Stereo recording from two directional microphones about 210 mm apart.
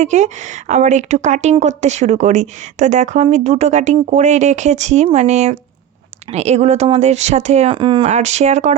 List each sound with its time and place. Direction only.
0.0 s a woman's voice: 35° right (ahead or behind)